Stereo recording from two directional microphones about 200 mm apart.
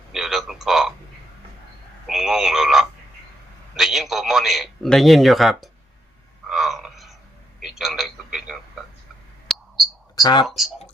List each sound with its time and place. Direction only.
0.1 s frog: centre (ahead or behind)
2.0 s a man's voice: centre (ahead or behind)
6.5 s a sound: centre (ahead or behind)
7.6 s a man's voice: centre (ahead or behind)
9.5 s a sound: centre (ahead or behind)
10.2 s speech: 20° left (ahead or behind)
10.4 s a man's voice: centre (ahead or behind)